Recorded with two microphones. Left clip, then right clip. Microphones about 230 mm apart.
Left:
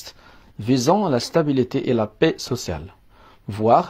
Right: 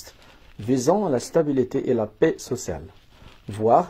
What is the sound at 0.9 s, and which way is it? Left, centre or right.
Speech, left.